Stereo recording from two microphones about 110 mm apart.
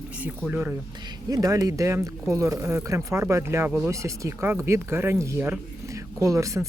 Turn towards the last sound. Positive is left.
turn(degrees=-30)  # may be behind; listen again after turning